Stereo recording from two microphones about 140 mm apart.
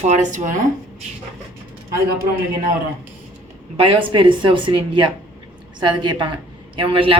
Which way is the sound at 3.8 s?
35° right (ahead or behind).